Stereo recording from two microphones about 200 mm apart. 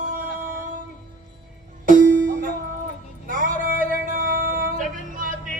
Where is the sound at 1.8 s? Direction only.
40° right (ahead or behind).